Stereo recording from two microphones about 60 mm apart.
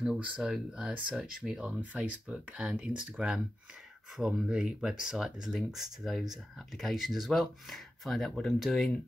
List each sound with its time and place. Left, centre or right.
0.4 s speech: centre